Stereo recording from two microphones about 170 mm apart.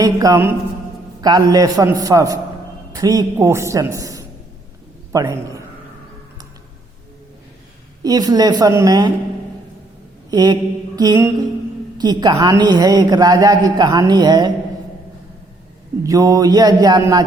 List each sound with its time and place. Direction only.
0.0 s a woman's voice: 20° right (ahead or behind)
8.0 s a woman's voice: 25° right (ahead or behind)
10.3 s mantra: 25° right (ahead or behind)
11.9 s a woman's voice: 25° right (ahead or behind)
16.0 s a woman's voice: 20° right (ahead or behind)